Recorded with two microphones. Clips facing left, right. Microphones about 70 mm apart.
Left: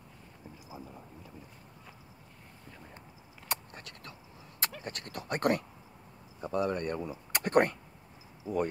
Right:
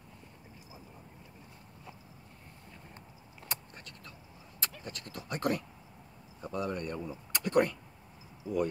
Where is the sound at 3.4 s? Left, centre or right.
Left.